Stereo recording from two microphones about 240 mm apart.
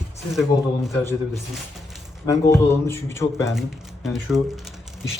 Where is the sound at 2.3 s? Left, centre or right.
Centre.